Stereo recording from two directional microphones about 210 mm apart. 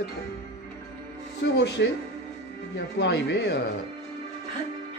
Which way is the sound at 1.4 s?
55° left (ahead or behind).